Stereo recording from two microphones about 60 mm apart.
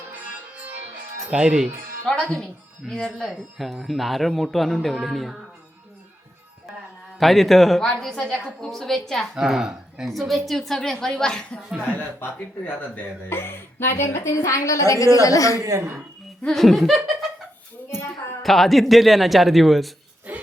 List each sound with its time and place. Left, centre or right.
1.3 s speech: centre
2.0 s a man's voice: centre
7.2 s a man's voice: centre
9.3 s speech: centre
10.1 s a man's voice: centre
11.9 s a woman's voice: left
15.6 s a woman's voice: right
16.6 s a man's voice: centre
18.4 s a man's voice: centre
20.3 s a sound: right